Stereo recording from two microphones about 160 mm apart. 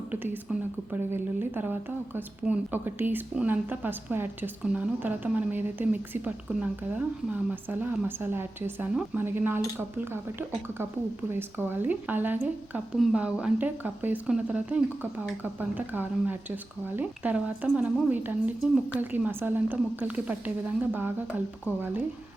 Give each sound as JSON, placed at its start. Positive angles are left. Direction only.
{"t": 0.5, "sound": "a woman's voice", "side_deg": -10}